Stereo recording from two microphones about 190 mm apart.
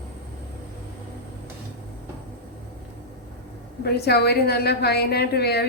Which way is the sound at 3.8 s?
60° left (ahead or behind).